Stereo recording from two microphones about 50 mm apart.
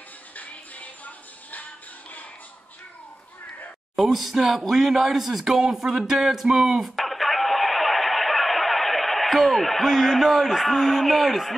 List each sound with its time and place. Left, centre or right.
0.4 s music: left
3.9 s speech: centre
7.0 s a sound: centre